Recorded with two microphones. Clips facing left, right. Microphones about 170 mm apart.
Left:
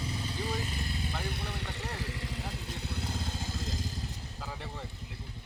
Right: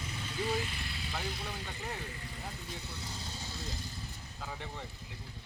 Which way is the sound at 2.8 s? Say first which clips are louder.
Left 7 dB; 65° left (ahead or behind).